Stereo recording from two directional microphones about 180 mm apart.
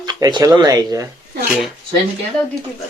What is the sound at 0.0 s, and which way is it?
Speech, 25° right (ahead or behind).